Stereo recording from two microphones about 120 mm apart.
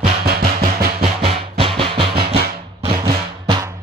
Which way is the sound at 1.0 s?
50° right (ahead or behind).